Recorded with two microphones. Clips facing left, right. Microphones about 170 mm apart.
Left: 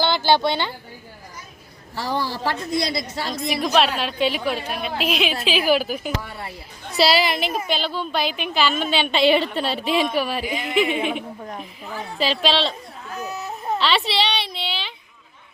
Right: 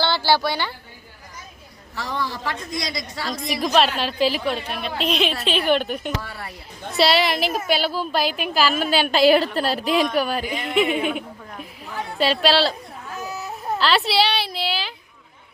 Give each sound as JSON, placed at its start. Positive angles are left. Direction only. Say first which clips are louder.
{"t": 0.0, "sound": "speech", "louder": "left 2 dB", "side_deg": 20}
{"t": 2.0, "sound": "a woman's voice", "louder": "left 3 dB", "side_deg": 35}
{"t": 3.5, "sound": "a woman's voice", "louder": "even", "side_deg": 0}
{"t": 6.2, "sound": "speech", "louder": "left 1 dB", "side_deg": 20}
{"t": 6.9, "sound": "a woman's voice", "louder": "even", "side_deg": 0}